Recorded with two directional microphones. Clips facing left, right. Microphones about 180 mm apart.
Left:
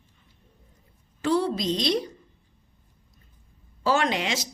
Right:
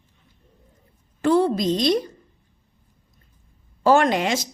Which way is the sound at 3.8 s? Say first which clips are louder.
Right 7 dB; 50° right (ahead or behind).